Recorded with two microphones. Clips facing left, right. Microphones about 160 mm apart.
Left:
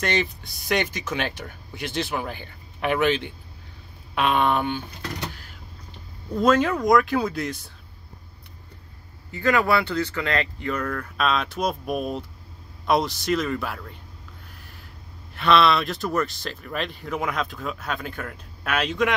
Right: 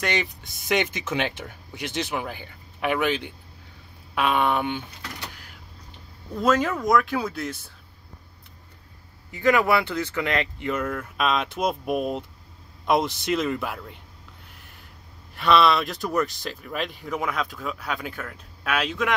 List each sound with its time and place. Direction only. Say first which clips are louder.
0.0 s speech: left 2 dB; 10° right (ahead or behind)
6.4 s speech: left 2 dB; 5° right (ahead or behind)
9.3 s speech: right 1 dB; 15° right (ahead or behind)
15.3 s speech: even; 10° right (ahead or behind)